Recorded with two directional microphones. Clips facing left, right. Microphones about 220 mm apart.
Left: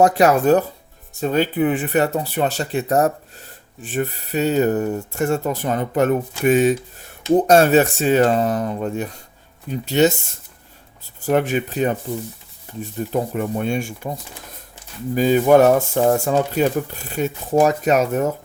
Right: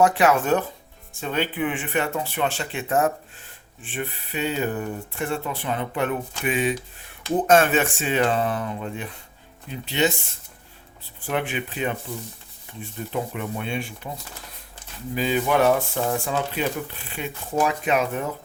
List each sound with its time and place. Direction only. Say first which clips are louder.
0.0 s speech: left 5 dB; 40° left (ahead or behind)
11.2 s speech: left 8 dB; 45° left (ahead or behind)
15.1 s speech: left 9 dB; 45° left (ahead or behind)